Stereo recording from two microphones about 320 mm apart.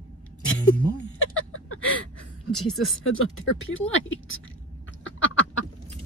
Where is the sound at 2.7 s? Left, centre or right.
Left.